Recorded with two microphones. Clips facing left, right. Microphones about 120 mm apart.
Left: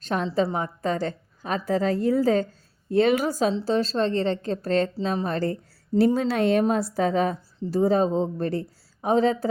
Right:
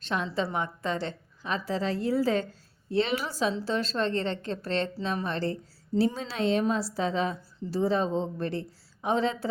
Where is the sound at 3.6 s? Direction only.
35° left (ahead or behind).